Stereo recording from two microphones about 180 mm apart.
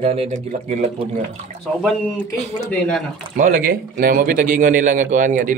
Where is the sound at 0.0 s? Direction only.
35° right (ahead or behind).